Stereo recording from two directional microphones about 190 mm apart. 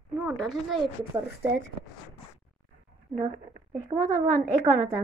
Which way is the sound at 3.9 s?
20° right (ahead or behind).